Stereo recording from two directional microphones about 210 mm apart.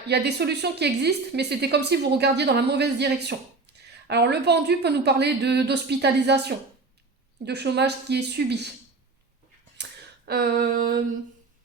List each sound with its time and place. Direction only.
0.1 s a woman's voice: 50° right (ahead or behind)
10.2 s a woman's voice: 45° right (ahead or behind)